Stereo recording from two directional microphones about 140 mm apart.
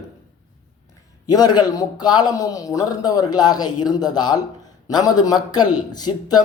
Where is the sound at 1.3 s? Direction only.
30° left (ahead or behind).